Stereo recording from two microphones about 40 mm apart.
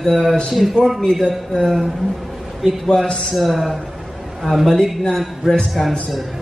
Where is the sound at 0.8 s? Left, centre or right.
Left.